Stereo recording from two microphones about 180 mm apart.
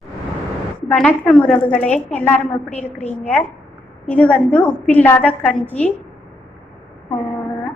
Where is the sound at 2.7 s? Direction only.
40° left (ahead or behind).